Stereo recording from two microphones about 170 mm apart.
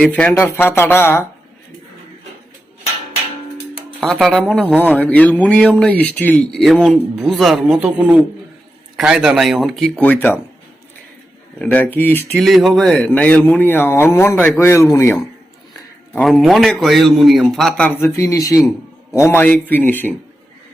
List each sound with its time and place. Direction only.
0.0 s speech: 10° left (ahead or behind)
4.0 s a man's voice: centre (ahead or behind)
11.6 s speech: 10° left (ahead or behind)
16.1 s a man's voice: centre (ahead or behind)